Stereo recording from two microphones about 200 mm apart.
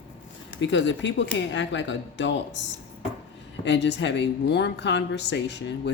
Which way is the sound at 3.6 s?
60° left (ahead or behind).